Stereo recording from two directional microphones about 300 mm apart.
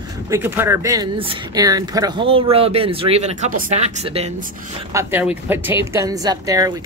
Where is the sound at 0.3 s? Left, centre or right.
Centre.